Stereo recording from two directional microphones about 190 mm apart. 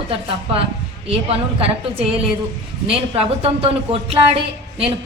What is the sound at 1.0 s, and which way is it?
Speech, 30° right (ahead or behind).